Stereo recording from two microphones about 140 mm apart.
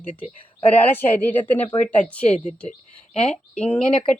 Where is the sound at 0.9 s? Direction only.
15° left (ahead or behind).